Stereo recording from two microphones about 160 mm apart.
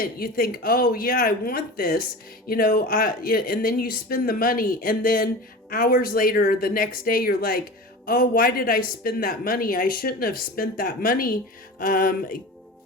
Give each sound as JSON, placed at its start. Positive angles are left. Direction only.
{"t": 0.0, "sound": "speech", "side_deg": 65}